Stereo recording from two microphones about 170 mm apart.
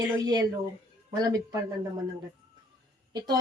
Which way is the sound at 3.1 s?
20° right (ahead or behind).